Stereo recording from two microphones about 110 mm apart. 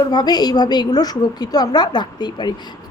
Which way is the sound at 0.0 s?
40° left (ahead or behind).